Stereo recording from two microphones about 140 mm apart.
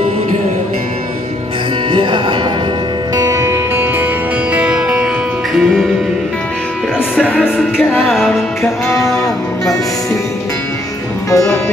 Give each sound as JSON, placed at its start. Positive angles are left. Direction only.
{"t": 1.9, "sound": "music", "side_deg": -35}
{"t": 3.2, "sound": "music", "side_deg": -20}
{"t": 7.5, "sound": "speech", "side_deg": -5}
{"t": 11.2, "sound": "music", "side_deg": 25}